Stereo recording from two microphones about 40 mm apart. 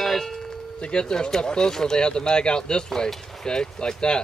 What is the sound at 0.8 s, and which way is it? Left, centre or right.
Speech, left.